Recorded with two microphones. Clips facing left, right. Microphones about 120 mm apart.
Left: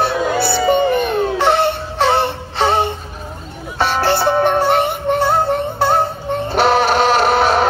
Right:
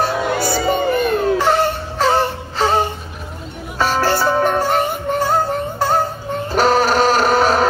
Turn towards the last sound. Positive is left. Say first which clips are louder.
# left 1 dB
turn(degrees=-40)  # may be behind; listen again after turning